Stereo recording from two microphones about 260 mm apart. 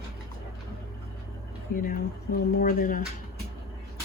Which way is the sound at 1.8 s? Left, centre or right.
Left.